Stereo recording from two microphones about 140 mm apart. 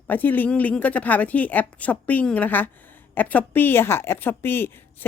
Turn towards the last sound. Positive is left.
turn(degrees=15)  # may be behind; listen again after turning